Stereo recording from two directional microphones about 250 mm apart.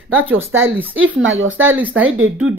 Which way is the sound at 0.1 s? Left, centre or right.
Centre.